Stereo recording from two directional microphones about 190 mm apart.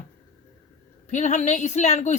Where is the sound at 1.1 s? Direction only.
40° left (ahead or behind).